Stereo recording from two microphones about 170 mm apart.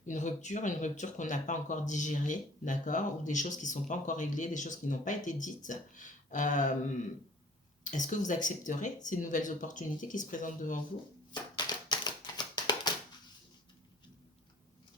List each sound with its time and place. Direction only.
0.0 s speech: 45° left (ahead or behind)
11.3 s typewriter: 25° left (ahead or behind)